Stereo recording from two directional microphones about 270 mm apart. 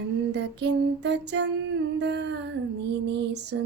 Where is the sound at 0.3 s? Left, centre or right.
Right.